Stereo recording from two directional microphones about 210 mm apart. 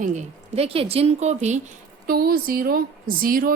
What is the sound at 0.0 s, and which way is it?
A woman's voice, 35° right (ahead or behind).